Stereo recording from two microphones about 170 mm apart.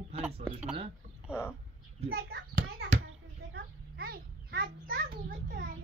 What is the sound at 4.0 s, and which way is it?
A child's voice, 65° right (ahead or behind).